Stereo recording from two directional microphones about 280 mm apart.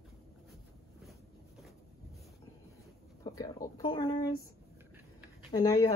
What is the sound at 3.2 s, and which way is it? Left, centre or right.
Speech, centre.